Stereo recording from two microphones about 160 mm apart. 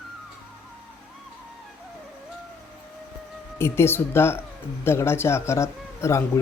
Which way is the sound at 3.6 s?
15° left (ahead or behind).